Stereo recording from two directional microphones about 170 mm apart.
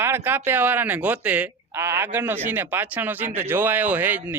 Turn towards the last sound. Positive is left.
turn(degrees=-10)  # may be behind; listen again after turning